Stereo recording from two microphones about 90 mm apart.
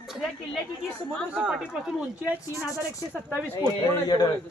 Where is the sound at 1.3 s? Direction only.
10° right (ahead or behind).